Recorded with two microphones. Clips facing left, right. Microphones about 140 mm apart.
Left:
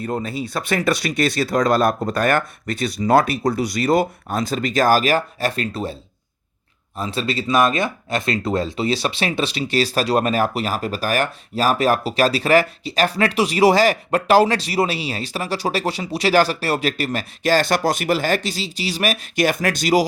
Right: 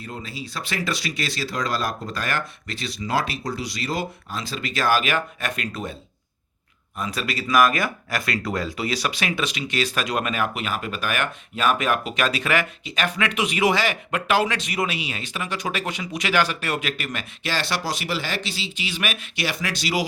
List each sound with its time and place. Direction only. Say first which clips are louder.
0.0 s speech: left 10 dB; 50° left (ahead or behind)